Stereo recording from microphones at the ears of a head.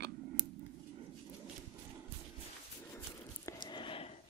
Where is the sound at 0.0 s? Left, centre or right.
Right.